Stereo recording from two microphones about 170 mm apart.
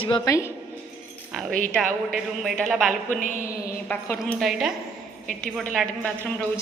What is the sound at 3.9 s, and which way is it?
Speech, 10° left (ahead or behind).